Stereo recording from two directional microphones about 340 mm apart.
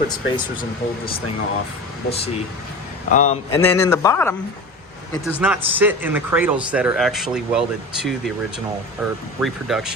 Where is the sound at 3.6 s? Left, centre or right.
Centre.